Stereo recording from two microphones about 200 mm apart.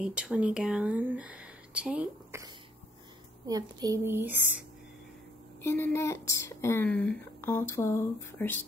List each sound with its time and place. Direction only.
0.0 s speech: 5° right (ahead or behind)
3.4 s a woman's voice: 20° right (ahead or behind)
5.6 s speech: 10° left (ahead or behind)